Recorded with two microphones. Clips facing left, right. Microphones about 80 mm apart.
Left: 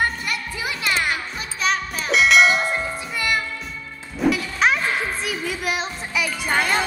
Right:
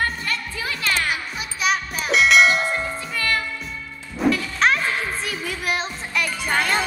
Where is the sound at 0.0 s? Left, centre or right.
Centre.